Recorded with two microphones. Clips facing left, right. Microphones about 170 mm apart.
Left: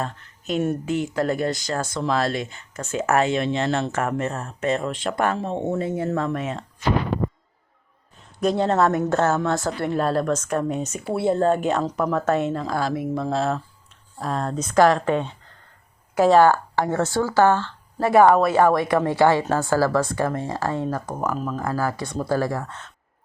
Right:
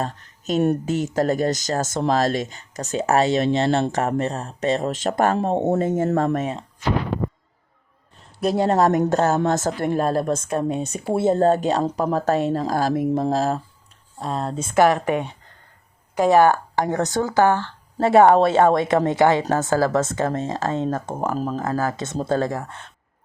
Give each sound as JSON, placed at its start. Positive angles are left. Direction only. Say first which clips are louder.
{"t": 0.0, "sound": "a sound", "louder": "right 2 dB", "side_deg": -40}
{"t": 0.9, "sound": "speech", "louder": "right 2 dB", "side_deg": -40}
{"t": 8.4, "sound": "speech", "louder": "right 1 dB", "side_deg": -10}
{"t": 9.1, "sound": "speech", "louder": "right 2 dB", "side_deg": -35}
{"t": 14.2, "sound": "speech", "louder": "even", "side_deg": -25}